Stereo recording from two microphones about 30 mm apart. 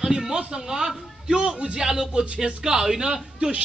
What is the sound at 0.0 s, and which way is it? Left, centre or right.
A man's voice, centre.